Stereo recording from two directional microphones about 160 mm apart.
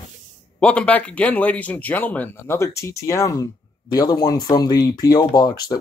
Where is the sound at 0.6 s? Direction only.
5° left (ahead or behind).